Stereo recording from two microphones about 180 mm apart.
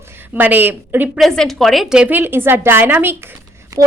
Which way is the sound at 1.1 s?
Centre (ahead or behind).